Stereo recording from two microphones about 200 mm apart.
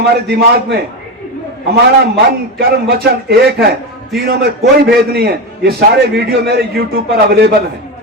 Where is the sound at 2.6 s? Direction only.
50° right (ahead or behind).